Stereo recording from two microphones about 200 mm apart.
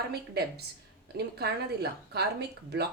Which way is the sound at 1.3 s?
55° right (ahead or behind).